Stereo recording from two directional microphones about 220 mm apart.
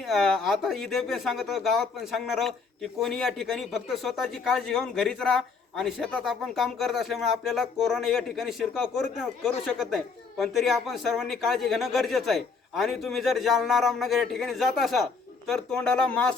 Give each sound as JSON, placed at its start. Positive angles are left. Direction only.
{"t": 0.0, "sound": "a man's voice", "side_deg": 0}